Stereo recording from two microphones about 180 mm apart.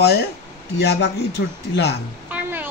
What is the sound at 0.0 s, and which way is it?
A man's voice, 65° left (ahead or behind).